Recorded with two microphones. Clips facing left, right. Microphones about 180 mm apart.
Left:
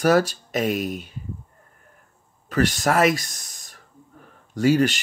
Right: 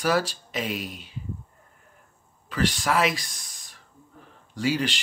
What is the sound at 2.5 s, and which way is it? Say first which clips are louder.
Speech: left 4 dB; 45° left (ahead or behind).